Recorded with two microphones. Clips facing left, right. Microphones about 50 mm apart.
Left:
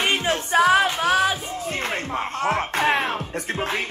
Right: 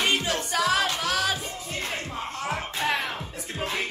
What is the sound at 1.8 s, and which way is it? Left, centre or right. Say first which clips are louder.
Music: left 5 dB; left.